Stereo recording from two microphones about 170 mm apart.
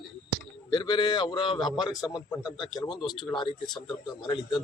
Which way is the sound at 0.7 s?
25° left (ahead or behind).